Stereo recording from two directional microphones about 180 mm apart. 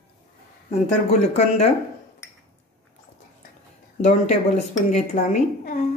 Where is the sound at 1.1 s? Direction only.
35° left (ahead or behind).